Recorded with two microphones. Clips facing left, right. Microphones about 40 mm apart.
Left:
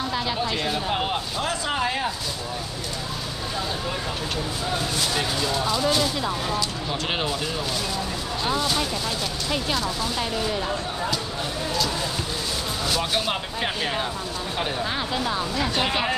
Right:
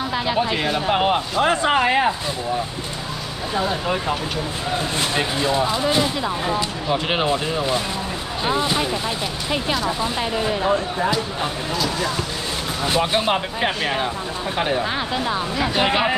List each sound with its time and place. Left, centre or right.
0.1 s speech: centre
3.5 s speech: right
9.8 s speech: right
12.8 s speech: right